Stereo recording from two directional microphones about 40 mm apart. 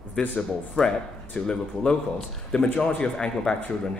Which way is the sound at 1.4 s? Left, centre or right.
Left.